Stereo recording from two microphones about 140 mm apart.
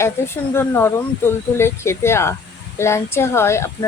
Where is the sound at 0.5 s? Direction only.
15° left (ahead or behind).